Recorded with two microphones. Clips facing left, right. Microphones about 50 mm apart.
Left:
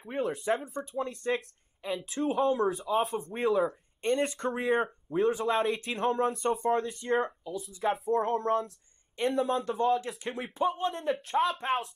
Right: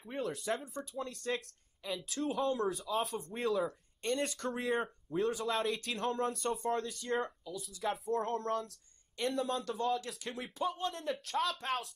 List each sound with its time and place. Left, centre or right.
0.1 s speech: centre
2.7 s speech: left
5.4 s speech: centre
9.7 s speech: left